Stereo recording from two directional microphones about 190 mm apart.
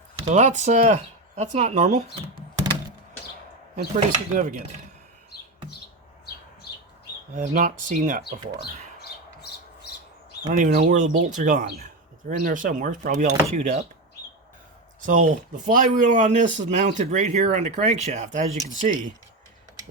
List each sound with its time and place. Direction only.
0.3 s speech: 40° right (ahead or behind)
3.9 s cutlery: 45° right (ahead or behind)
7.3 s cutlery: 45° right (ahead or behind)
10.4 s speech: 40° right (ahead or behind)
12.4 s cutlery: 45° right (ahead or behind)
15.0 s speech: 40° right (ahead or behind)